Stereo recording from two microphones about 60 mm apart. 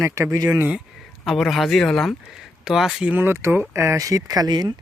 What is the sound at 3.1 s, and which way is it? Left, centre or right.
Speech, right.